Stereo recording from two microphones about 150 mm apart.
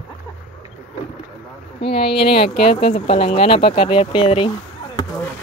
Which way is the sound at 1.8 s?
40° left (ahead or behind).